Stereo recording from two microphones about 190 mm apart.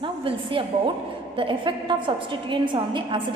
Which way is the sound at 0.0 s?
30° right (ahead or behind).